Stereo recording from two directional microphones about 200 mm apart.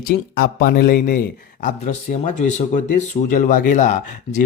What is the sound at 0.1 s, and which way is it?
Speech, 45° left (ahead or behind).